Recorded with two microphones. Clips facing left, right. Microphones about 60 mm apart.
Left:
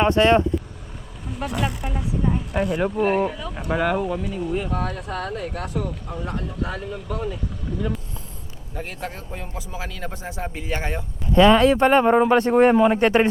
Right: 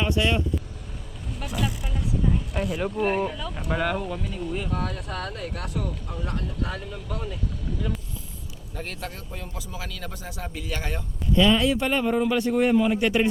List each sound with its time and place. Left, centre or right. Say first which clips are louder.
0.0 s speech: left 8 dB; left
1.3 s speech: left 4 dB; centre
8.7 s speech: left 3 dB; centre
9.0 s speech: left 4 dB; left
11.3 s speech: left 7 dB; left